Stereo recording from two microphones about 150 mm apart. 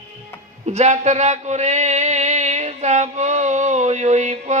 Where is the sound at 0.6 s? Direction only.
50° right (ahead or behind).